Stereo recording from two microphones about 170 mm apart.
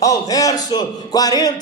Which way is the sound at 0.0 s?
20° left (ahead or behind).